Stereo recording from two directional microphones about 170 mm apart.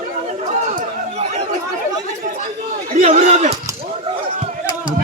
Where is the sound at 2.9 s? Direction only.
40° right (ahead or behind).